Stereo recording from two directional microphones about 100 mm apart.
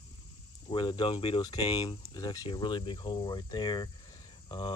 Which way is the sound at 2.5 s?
50° left (ahead or behind).